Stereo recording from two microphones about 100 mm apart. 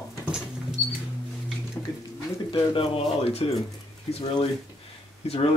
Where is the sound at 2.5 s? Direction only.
60° left (ahead or behind); by 4.5 s 90° left.